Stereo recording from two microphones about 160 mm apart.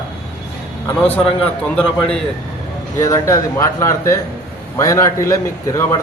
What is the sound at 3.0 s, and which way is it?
A man's voice, 20° left (ahead or behind).